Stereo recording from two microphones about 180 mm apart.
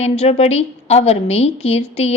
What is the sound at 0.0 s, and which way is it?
A woman's voice, 35° left (ahead or behind).